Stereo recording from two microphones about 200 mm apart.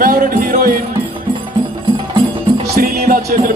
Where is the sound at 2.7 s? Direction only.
50° right (ahead or behind).